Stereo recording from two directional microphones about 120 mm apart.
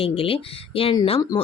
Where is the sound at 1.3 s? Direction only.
35° left (ahead or behind).